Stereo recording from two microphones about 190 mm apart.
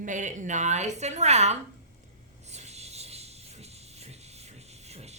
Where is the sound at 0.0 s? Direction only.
40° right (ahead or behind).